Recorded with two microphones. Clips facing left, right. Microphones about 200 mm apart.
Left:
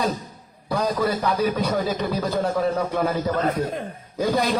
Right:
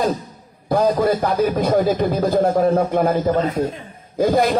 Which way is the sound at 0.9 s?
45° right (ahead or behind).